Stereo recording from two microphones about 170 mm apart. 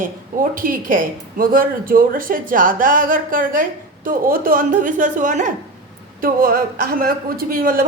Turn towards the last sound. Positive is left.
turn(degrees=-60)  # may be behind; listen again after turning